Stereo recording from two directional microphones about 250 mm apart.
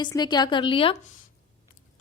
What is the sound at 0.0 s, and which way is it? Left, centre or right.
Speech, centre.